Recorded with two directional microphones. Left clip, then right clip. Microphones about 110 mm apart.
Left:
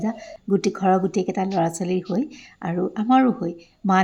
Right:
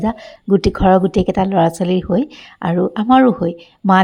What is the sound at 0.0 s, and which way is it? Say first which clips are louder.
Speech: right 7 dB; 35° right (ahead or behind).